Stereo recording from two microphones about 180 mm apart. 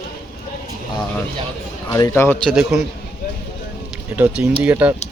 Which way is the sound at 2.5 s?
5° right (ahead or behind).